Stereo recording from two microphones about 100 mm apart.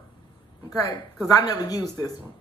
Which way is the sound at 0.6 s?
35° left (ahead or behind).